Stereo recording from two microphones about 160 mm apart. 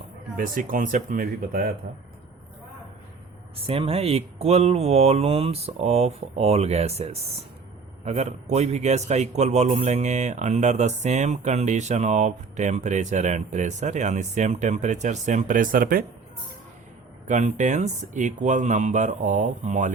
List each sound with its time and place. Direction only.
0.3 s speech: 60° right (ahead or behind)
3.7 s a man's voice: 40° right (ahead or behind); by 16.0 s 65° right (ahead or behind)
17.2 s a man's voice: 50° right (ahead or behind)